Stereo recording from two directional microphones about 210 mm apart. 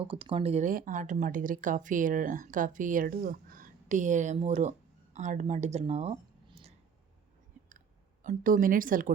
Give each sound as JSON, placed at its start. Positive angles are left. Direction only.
{"t": 0.0, "sound": "speech", "side_deg": -25}
{"t": 8.2, "sound": "speech", "side_deg": -40}